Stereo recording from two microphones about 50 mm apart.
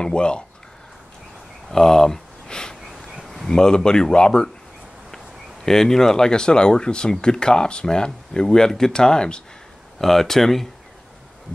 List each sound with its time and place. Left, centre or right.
0.0 s speech: centre
1.7 s a sound: centre
3.4 s speech: centre
5.7 s speech: centre